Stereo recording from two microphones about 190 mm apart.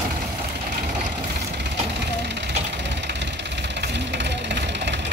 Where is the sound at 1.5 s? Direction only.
65° right (ahead or behind).